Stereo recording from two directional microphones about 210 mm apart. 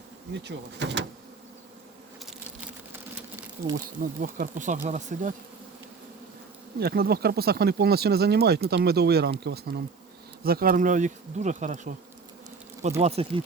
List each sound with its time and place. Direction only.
0.4 s speech: 55° right (ahead or behind)
4.2 s bee: 40° right (ahead or behind)
6.7 s speech: 45° right (ahead or behind)
10.4 s bee: 45° right (ahead or behind)
13.0 s speech: 30° right (ahead or behind)